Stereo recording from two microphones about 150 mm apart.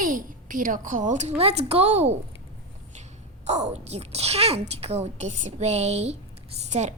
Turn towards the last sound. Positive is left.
turn(degrees=-50)  # may be behind; listen again after turning